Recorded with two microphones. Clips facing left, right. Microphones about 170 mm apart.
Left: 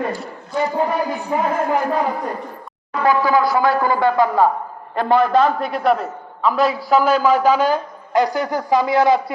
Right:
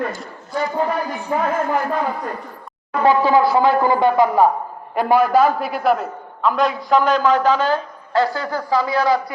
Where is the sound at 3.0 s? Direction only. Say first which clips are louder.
Right 2 dB; 25° right (ahead or behind).